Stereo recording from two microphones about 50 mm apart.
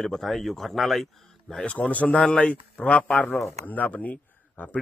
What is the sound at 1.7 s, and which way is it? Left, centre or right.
A man's voice, left.